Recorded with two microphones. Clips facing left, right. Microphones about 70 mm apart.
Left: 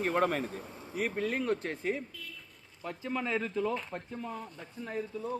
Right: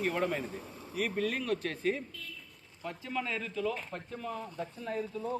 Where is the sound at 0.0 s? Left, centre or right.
Left.